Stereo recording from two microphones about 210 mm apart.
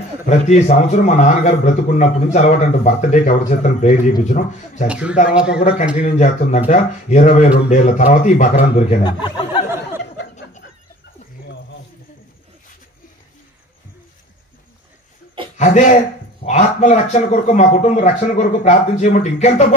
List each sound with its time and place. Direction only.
0.5 s a man's voice: 35° left (ahead or behind)
4.8 s a man's voice: 5° right (ahead or behind)
6.1 s a man's voice: 35° left (ahead or behind)
9.0 s speech: 20° left (ahead or behind)
15.5 s a man's voice: 35° left (ahead or behind)